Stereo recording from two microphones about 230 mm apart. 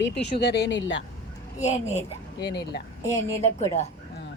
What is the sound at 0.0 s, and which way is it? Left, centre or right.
Speech, left.